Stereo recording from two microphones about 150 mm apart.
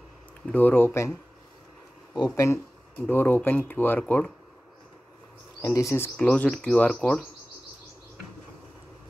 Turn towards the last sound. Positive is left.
turn(degrees=0)  # may be behind; listen again after turning